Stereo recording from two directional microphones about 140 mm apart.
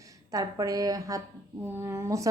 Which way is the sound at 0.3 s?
25° right (ahead or behind).